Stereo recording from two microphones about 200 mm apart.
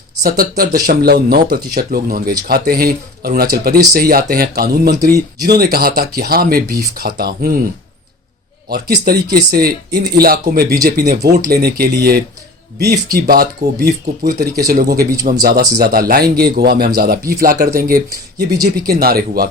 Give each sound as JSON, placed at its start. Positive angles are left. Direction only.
{"t": 0.2, "sound": "speech", "side_deg": -45}
{"t": 9.0, "sound": "speech", "side_deg": -50}